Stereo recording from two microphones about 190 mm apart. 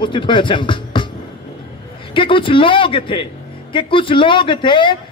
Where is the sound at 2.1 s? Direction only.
25° left (ahead or behind).